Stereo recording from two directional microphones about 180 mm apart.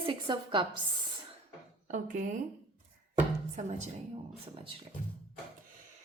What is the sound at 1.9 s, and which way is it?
Speech, 45° right (ahead or behind).